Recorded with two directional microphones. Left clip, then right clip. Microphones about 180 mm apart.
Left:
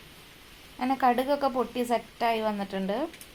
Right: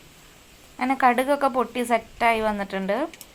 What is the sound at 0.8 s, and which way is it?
Speech, 15° right (ahead or behind).